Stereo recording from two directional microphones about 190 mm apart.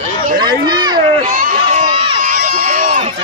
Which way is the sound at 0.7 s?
20° right (ahead or behind).